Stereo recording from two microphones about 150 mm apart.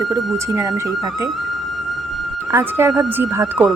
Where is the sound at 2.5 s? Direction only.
15° right (ahead or behind).